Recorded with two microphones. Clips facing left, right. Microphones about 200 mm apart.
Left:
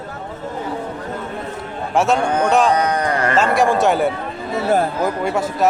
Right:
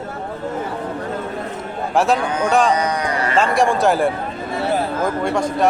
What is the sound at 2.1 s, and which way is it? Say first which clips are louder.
Speech: left 3 dB; 55° left (ahead or behind).